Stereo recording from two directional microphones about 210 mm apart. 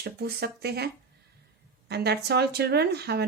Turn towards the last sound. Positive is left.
turn(degrees=-50)  # may be behind; listen again after turning